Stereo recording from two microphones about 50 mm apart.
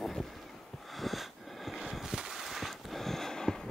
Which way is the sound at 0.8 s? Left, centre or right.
Centre.